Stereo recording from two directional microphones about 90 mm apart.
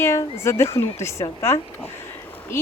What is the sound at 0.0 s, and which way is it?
Speech, 30° left (ahead or behind).